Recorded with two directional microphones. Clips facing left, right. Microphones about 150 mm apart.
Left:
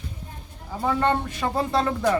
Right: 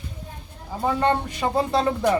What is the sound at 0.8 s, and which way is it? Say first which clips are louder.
Speech: right 1 dB; 20° right (ahead or behind).